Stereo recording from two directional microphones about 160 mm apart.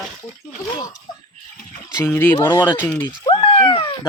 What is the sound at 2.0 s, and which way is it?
Speech, 10° left (ahead or behind).